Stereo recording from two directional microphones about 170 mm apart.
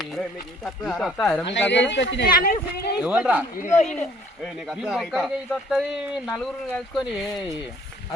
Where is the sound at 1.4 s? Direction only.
90° left; by 2.9 s 65° left (ahead or behind).